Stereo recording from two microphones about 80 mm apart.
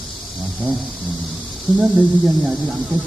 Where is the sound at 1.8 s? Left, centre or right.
Centre.